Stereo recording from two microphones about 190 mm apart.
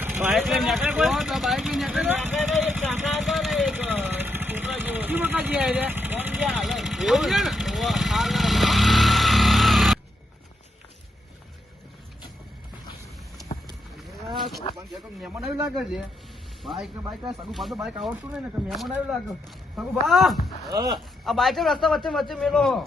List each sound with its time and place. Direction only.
0.0 s a sound: 10° right (ahead or behind)
0.3 s vehicle: centre (ahead or behind)
14.3 s a sound: centre (ahead or behind)
14.8 s a man's voice: centre (ahead or behind)
20.7 s speech: 20° right (ahead or behind)
21.2 s a man's voice: centre (ahead or behind)